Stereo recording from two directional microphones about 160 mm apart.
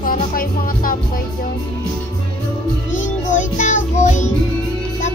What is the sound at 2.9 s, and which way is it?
Music, 50° left (ahead or behind).